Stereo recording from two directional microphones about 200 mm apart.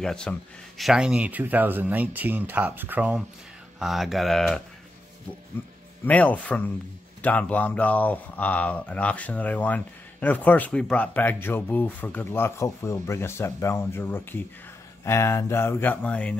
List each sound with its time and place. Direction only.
0.0 s speech: 5° left (ahead or behind)